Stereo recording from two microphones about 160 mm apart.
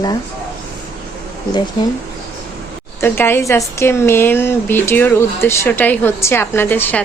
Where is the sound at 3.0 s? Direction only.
15° left (ahead or behind).